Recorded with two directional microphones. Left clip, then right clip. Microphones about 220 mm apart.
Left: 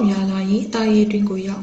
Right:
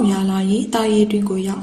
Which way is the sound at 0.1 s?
35° right (ahead or behind).